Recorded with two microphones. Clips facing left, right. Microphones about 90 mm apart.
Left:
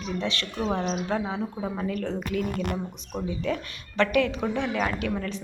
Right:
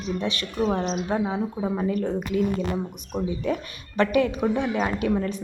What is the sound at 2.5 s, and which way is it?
Speech, 60° left (ahead or behind).